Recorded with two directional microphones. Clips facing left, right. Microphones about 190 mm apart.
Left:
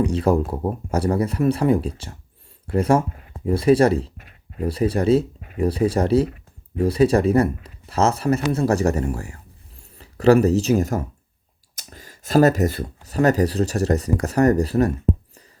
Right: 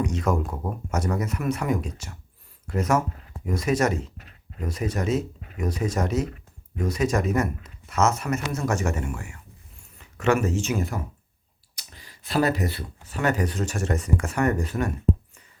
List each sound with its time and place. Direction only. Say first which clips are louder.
0.0 s speech: left 6 dB; 30° left (ahead or behind)